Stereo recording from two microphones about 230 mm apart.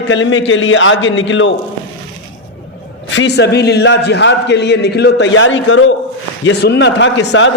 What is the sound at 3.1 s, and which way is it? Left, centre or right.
A man's voice, left.